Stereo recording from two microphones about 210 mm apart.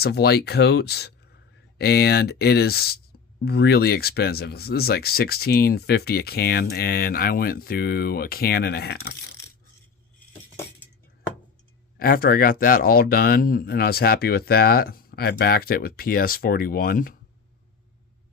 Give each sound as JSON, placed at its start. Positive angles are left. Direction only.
{"t": 0.0, "sound": "speech", "side_deg": 50}
{"t": 11.9, "sound": "speech", "side_deg": 45}